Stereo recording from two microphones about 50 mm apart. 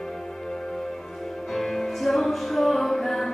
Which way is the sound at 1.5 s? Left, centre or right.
Centre.